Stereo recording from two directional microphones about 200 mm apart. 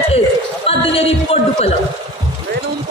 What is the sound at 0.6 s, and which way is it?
A man's voice, 30° left (ahead or behind).